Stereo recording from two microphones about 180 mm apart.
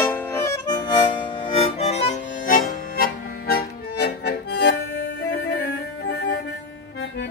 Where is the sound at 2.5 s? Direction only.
55° left (ahead or behind).